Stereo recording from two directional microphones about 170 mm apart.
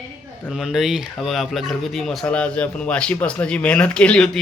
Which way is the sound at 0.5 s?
Centre (ahead or behind).